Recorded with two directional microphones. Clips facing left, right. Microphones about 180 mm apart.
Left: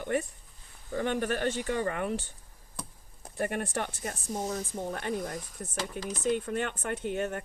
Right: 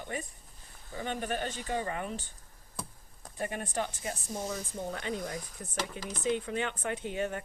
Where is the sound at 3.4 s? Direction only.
65° left (ahead or behind).